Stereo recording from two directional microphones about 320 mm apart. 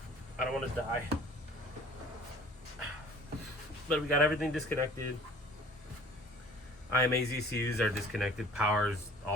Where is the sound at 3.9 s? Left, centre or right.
Centre.